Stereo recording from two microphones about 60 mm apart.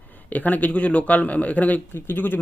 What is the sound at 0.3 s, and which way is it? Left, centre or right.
Speech, left.